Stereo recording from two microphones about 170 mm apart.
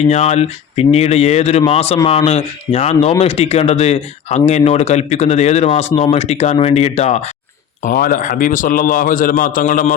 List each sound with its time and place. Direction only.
0.1 s speech: 40° left (ahead or behind)
7.8 s a man's voice: 55° left (ahead or behind)